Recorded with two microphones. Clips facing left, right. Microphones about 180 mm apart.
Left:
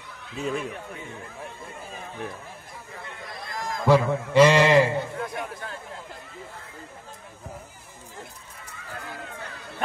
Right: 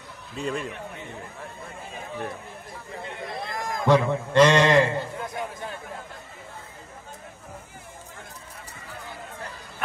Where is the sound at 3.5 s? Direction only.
55° right (ahead or behind).